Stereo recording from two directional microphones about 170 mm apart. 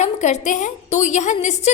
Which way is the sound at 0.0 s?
45° left (ahead or behind).